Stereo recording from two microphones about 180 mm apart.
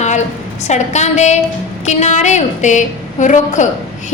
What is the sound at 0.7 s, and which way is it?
A woman's voice, 40° left (ahead or behind).